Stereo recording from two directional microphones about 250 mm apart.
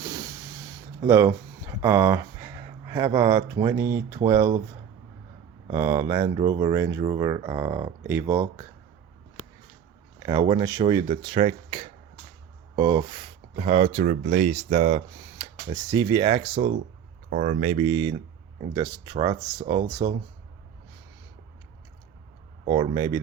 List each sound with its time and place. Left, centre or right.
0.0 s a sound: centre
5.7 s speech: centre
10.2 s speech: centre
15.4 s speech: centre
17.2 s speech: right; by 20.1 s centre
22.6 s speech: right